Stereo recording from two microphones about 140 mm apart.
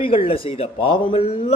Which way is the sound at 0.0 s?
40° left (ahead or behind).